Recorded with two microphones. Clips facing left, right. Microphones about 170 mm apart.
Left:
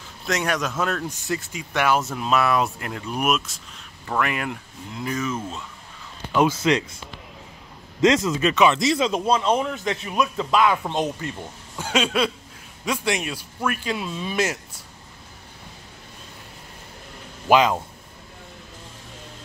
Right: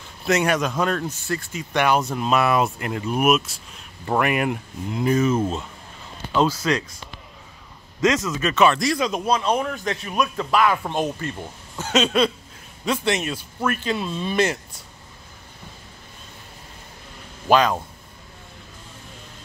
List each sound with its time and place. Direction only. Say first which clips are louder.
0.2 s speech: right 4 dB; centre (ahead or behind)
1.2 s speech: even; 20° left (ahead or behind)
1.6 s speech: right 2 dB; 5° left (ahead or behind)
4.2 s speech: right 3 dB; 15° right (ahead or behind)
6.3 s speech: left 1 dB; 20° left (ahead or behind)
8.0 s speech: left 2 dB; 30° left (ahead or behind)
10.8 s speech: even; centre (ahead or behind)
11.2 s speech: right 1 dB; 15° left (ahead or behind)
17.5 s speech: even; 15° left (ahead or behind)